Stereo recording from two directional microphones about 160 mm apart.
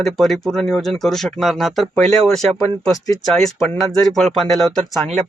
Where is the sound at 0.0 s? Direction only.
Centre (ahead or behind).